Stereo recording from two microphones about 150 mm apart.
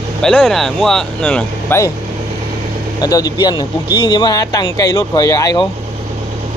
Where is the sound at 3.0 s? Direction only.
25° left (ahead or behind).